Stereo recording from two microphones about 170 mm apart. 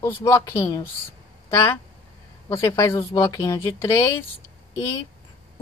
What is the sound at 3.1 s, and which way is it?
Speech, 20° left (ahead or behind).